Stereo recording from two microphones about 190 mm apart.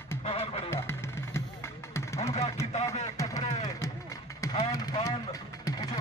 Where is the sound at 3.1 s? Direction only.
20° left (ahead or behind).